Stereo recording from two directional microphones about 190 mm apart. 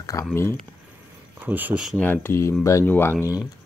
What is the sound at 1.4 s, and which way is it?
Speech, 10° right (ahead or behind).